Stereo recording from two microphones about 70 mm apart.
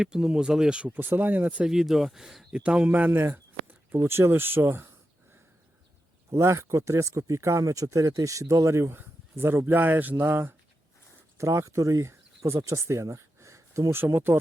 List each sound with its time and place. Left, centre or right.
0.0 s speech: centre
0.9 s speech: right
1.6 s speech: centre
2.5 s speech: centre
3.1 s speech: right
6.3 s speech: right
11.3 s speech: right
13.9 s speech: right